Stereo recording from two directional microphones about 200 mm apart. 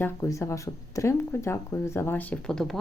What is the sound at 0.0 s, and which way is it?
Speech, 15° left (ahead or behind).